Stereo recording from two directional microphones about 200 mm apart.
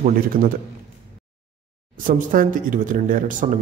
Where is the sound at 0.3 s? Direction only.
45° right (ahead or behind).